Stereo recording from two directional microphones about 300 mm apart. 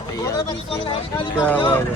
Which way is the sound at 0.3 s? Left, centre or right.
Centre.